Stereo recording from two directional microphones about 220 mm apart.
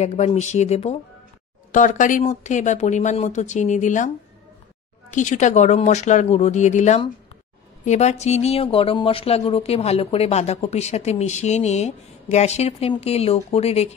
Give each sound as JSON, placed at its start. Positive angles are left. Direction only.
{"t": 0.0, "sound": "speech", "side_deg": 30}
{"t": 5.1, "sound": "speech", "side_deg": 35}